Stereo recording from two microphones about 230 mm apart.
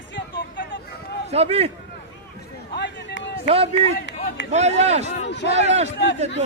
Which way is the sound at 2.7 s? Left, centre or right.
Left.